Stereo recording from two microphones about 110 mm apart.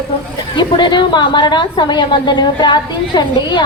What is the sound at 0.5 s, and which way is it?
A woman's voice, 45° left (ahead or behind).